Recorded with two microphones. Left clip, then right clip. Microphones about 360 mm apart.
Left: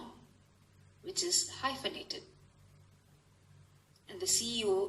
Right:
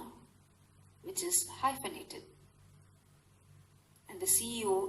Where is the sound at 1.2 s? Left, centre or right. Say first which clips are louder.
Left 1 dB; centre.